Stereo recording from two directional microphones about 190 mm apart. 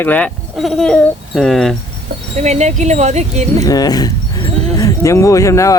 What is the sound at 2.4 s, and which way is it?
Speech, 35° right (ahead or behind).